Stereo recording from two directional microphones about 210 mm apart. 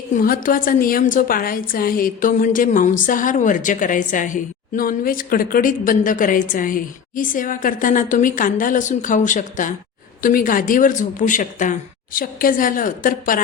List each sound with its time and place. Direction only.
0.1 s a woman's voice: 40° left (ahead or behind)